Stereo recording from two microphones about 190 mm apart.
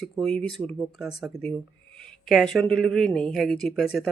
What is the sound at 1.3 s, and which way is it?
Speech, 55° left (ahead or behind).